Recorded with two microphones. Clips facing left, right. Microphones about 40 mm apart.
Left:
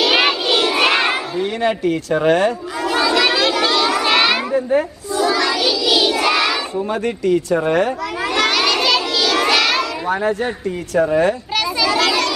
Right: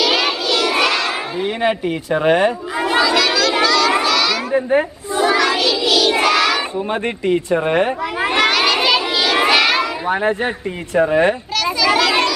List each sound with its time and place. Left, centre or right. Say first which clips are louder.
0.1 s crowd: left 2 dB; left
1.4 s speech: right 1 dB; centre
2.9 s crowd: right 1 dB; right
3.2 s a sound: even; left
4.0 s children playing: left 2 dB; left
4.6 s child singing: right 1 dB; right
6.3 s a sound: right 2 dB; centre
6.9 s speech: left 1 dB; right
8.5 s a sound: left 1 dB; centre
10.0 s speech: right 1 dB; right